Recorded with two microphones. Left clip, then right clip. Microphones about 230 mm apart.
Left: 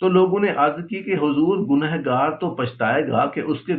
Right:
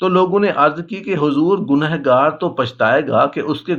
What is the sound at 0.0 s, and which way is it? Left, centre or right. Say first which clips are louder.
A man's voice: right 3 dB; right.